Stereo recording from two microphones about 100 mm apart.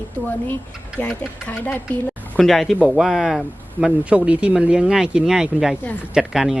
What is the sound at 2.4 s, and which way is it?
Speech, centre (ahead or behind).